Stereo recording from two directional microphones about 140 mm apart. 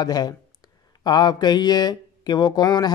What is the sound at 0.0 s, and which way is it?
Speech, 30° left (ahead or behind).